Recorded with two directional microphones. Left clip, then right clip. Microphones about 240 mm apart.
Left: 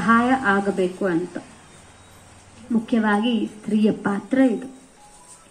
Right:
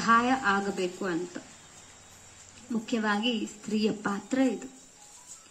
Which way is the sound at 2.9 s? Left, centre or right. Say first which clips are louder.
Left 8 dB; right.